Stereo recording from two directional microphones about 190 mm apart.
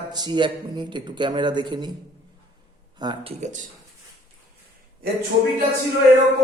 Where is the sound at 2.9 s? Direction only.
25° right (ahead or behind).